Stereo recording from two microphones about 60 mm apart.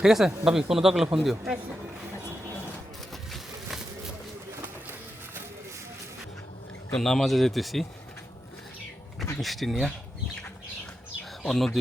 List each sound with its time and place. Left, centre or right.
0.0 s speech: centre
4.6 s pigeon: right
6.9 s speech: centre
9.4 s speech: centre
11.4 s speech: centre